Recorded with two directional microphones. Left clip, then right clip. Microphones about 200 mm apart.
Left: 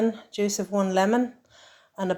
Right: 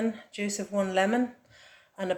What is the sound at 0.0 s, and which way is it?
Speech, 30° left (ahead or behind).